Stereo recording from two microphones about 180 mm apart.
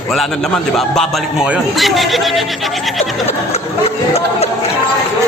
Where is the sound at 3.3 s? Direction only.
35° left (ahead or behind).